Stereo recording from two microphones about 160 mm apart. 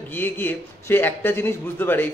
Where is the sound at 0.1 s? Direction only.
10° left (ahead or behind).